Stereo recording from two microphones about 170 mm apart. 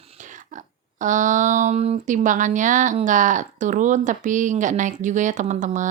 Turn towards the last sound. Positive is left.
turn(degrees=-45)  # may be behind; listen again after turning